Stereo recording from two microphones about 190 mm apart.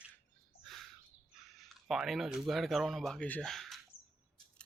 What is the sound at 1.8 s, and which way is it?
Speech, centre (ahead or behind).